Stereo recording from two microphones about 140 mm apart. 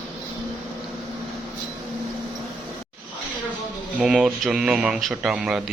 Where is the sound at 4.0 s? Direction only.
5° right (ahead or behind).